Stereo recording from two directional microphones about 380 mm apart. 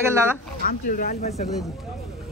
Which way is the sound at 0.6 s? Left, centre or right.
Left.